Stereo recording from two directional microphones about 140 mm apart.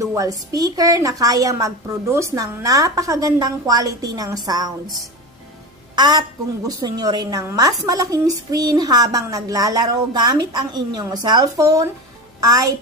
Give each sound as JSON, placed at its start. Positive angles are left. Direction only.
{"t": 0.0, "sound": "a woman's voice", "side_deg": -25}
{"t": 5.9, "sound": "a woman's voice", "side_deg": -30}